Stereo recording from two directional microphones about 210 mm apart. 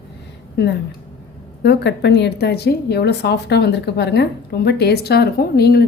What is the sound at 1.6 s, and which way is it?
A woman's voice, 55° left (ahead or behind).